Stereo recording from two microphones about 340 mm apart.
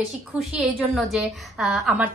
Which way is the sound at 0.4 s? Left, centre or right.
Centre.